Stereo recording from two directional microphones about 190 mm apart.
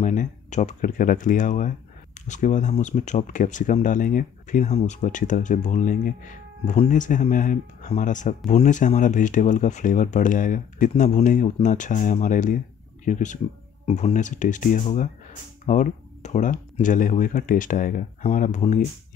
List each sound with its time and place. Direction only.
0.0 s speech: 40° left (ahead or behind)